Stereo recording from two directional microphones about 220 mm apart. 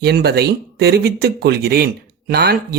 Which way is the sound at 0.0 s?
45° right (ahead or behind).